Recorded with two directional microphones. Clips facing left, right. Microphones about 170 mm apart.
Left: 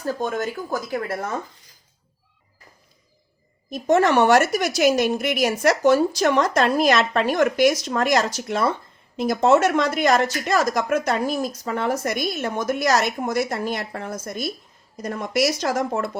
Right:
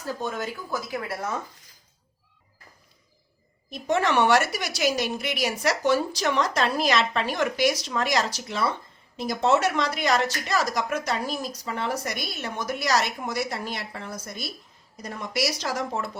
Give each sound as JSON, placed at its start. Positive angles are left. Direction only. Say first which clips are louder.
{"t": 0.0, "sound": "speech", "louder": "left 5 dB", "side_deg": 50}
{"t": 3.7, "sound": "speech", "louder": "left 6 dB", "side_deg": 45}